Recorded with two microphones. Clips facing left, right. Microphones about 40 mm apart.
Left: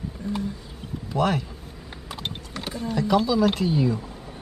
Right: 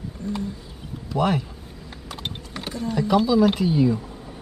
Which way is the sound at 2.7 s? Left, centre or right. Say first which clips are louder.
Right 2 dB; centre.